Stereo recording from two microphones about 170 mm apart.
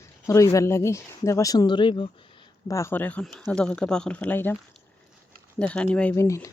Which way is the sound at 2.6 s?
15° left (ahead or behind).